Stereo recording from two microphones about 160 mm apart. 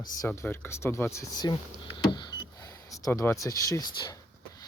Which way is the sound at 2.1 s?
25° left (ahead or behind).